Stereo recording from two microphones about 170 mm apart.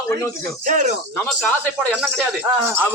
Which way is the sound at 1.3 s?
5° left (ahead or behind).